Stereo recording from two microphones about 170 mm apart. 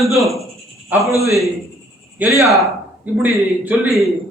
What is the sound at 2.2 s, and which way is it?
A man's voice, centre (ahead or behind).